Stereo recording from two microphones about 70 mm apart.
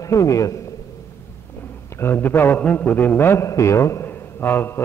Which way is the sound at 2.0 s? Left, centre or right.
Left.